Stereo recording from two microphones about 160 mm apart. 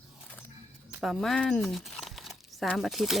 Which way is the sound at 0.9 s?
Centre (ahead or behind).